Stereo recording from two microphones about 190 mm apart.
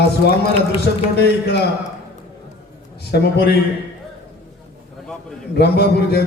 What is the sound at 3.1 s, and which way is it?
Speech, 60° left (ahead or behind).